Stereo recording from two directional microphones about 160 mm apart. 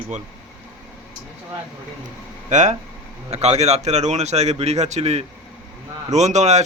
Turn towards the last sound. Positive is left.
turn(degrees=-45)  # may be behind; listen again after turning